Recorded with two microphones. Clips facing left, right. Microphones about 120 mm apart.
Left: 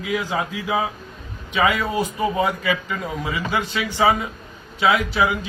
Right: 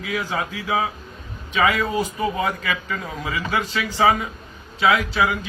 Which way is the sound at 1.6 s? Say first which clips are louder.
Even; 25° left (ahead or behind).